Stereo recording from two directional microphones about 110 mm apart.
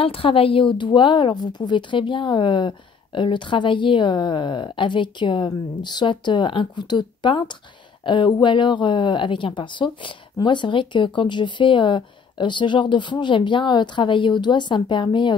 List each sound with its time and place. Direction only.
0.0 s speech: 55° left (ahead or behind)